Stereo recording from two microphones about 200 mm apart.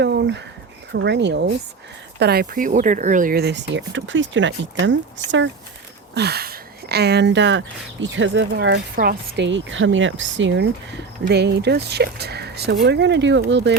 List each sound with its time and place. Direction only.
0.0 s a sound: 60° right (ahead or behind)
0.9 s speech: 60° right (ahead or behind)
6.1 s speech: 55° right (ahead or behind)